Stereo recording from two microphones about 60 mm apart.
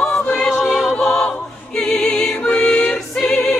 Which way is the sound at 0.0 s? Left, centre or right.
Centre.